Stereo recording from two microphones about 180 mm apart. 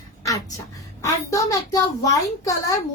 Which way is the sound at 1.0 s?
20° left (ahead or behind).